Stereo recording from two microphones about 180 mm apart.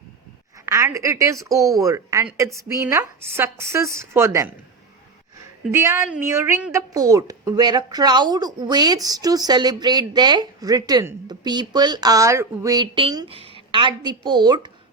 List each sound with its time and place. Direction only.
0.6 s a woman's voice: 15° right (ahead or behind)
5.7 s a woman's voice: 15° right (ahead or behind)